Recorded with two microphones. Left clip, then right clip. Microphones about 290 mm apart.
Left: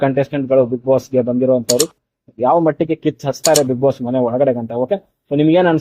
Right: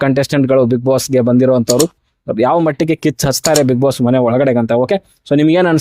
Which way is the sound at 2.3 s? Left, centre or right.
Right.